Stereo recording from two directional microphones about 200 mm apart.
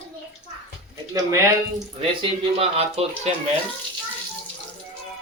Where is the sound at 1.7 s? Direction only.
30° right (ahead or behind).